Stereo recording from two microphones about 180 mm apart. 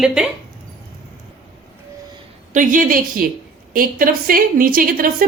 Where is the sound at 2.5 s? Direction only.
50° right (ahead or behind).